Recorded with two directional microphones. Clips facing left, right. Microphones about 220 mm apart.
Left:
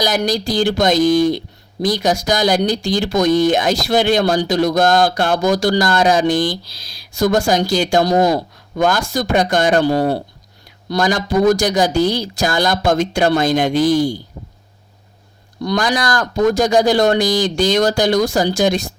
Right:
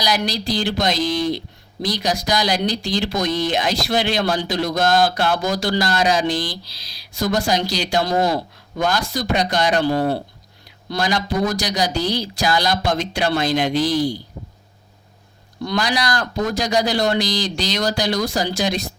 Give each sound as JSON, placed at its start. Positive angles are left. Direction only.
{"t": 0.0, "sound": "speech", "side_deg": 45}
{"t": 15.6, "sound": "speech", "side_deg": 45}